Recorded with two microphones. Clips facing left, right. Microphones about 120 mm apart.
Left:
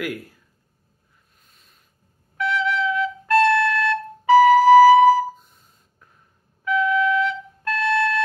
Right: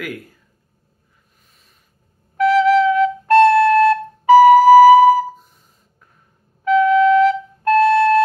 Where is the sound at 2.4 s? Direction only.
50° right (ahead or behind).